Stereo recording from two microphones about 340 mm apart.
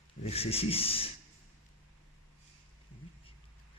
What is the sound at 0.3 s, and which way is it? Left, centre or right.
Speech, centre.